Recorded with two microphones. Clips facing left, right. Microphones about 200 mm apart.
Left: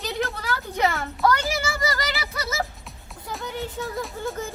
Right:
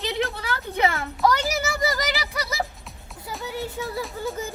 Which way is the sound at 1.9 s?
15° right (ahead or behind).